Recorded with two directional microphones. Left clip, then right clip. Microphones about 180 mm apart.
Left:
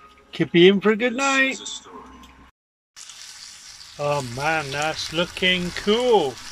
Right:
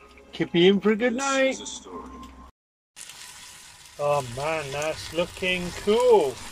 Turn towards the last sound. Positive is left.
turn(degrees=0)  # may be behind; listen again after turning